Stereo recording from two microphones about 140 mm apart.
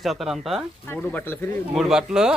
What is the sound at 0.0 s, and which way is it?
Speech, centre (ahead or behind).